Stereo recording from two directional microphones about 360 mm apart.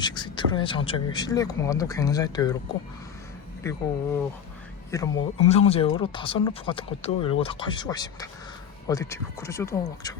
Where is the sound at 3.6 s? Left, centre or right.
Centre.